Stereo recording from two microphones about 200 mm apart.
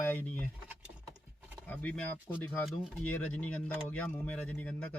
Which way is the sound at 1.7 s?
10° left (ahead or behind).